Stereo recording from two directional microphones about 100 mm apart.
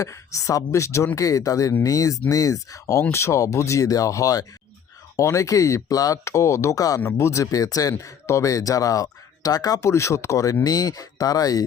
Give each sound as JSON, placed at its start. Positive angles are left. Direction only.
{"t": 0.0, "sound": "speech", "side_deg": 30}